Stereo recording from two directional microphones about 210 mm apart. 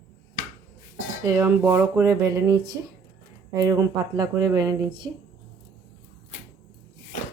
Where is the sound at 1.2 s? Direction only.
10° right (ahead or behind).